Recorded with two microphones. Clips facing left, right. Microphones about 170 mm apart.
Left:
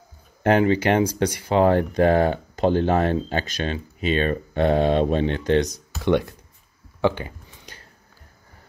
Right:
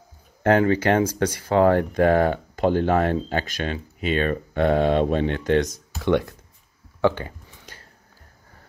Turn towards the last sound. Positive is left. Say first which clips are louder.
# left 1 dB
turn(degrees=15)  # may be behind; listen again after turning